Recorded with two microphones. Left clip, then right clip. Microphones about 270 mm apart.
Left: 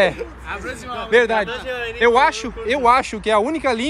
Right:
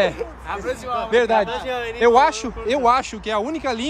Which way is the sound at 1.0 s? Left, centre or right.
Centre.